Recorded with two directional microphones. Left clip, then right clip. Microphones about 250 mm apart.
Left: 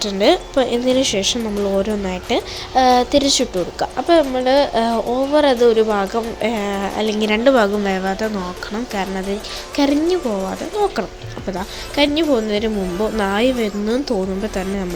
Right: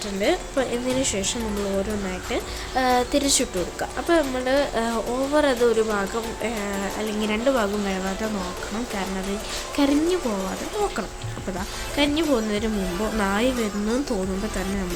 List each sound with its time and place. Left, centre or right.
0.0 s a woman's voice: left
9.7 s a woman's voice: centre
11.9 s a woman's voice: centre